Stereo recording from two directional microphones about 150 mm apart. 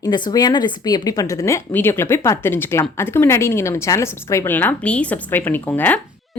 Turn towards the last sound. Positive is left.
turn(degrees=10)  # may be behind; listen again after turning